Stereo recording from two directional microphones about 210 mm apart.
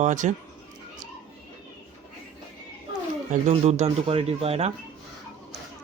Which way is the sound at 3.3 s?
30° right (ahead or behind).